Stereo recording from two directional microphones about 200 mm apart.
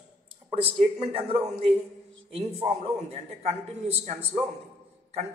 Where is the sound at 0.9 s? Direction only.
30° right (ahead or behind).